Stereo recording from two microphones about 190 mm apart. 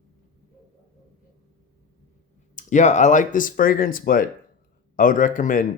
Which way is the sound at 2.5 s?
40° left (ahead or behind).